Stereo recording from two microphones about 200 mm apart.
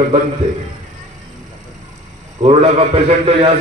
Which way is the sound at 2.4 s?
30° right (ahead or behind).